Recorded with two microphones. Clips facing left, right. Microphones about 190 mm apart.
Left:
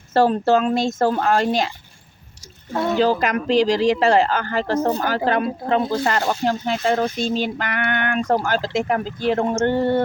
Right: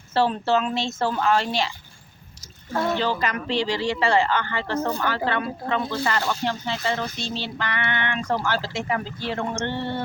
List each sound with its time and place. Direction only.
0.1 s speech: 45° left (ahead or behind)
3.0 s a man's voice: 40° left (ahead or behind)